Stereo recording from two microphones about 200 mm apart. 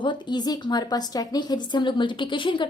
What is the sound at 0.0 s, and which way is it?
A woman's voice, 20° left (ahead or behind).